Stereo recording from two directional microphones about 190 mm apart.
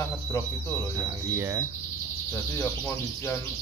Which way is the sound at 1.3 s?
15° right (ahead or behind).